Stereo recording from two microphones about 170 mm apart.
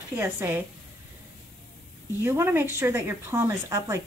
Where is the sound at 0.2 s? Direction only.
10° right (ahead or behind).